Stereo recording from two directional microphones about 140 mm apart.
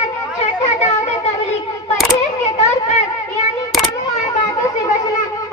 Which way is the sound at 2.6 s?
50° left (ahead or behind).